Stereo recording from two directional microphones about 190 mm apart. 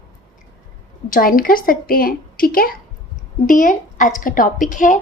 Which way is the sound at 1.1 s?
50° left (ahead or behind).